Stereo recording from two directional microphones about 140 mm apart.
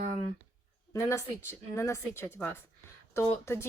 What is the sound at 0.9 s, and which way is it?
Speech, 20° left (ahead or behind).